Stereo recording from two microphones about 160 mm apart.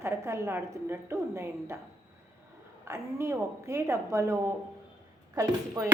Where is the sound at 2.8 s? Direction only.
15° right (ahead or behind).